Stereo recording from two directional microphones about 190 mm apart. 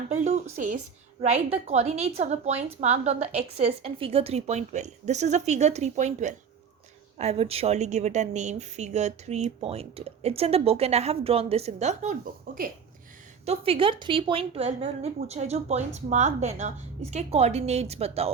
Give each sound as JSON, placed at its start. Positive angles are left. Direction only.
{"t": 0.1, "sound": "a sound", "side_deg": -35}
{"t": 0.5, "sound": "a woman's voice", "side_deg": -40}
{"t": 13.4, "sound": "a woman's voice", "side_deg": -30}